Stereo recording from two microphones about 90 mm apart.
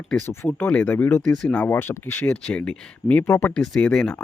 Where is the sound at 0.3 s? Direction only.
25° left (ahead or behind).